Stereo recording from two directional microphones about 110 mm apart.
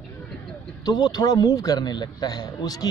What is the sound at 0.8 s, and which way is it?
A man's voice, 40° left (ahead or behind).